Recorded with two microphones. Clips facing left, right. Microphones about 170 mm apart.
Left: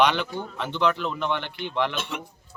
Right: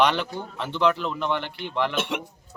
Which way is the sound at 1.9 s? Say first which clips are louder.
Right 5 dB; 75° right (ahead or behind).